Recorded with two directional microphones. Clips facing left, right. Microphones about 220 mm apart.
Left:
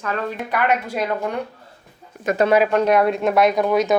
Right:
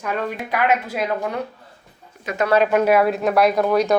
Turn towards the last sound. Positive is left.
turn(degrees=0)  # may be behind; listen again after turning